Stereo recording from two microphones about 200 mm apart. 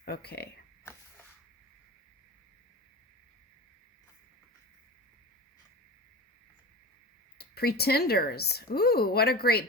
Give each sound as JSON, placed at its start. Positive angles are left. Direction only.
{"t": 0.0, "sound": "speech", "side_deg": 50}
{"t": 7.3, "sound": "speech", "side_deg": 50}